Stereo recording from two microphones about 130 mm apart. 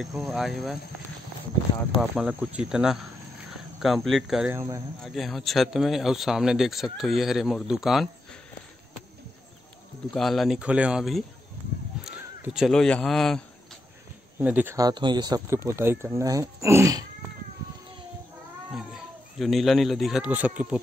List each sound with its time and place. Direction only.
0.0 s speech: centre (ahead or behind)
2.0 s speech: 5° right (ahead or behind)
10.1 s speech: centre (ahead or behind)
11.9 s crow: 5° right (ahead or behind)
12.5 s speech: centre (ahead or behind)
14.4 s speech: 15° right (ahead or behind)
14.8 s speech: 35° right (ahead or behind)
15.5 s speech: 20° right (ahead or behind)
19.3 s speech: centre (ahead or behind)